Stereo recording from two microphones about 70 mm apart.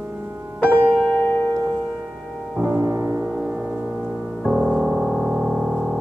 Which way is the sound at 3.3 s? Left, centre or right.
Centre.